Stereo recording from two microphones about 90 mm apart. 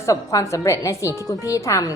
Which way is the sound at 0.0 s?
40° left (ahead or behind).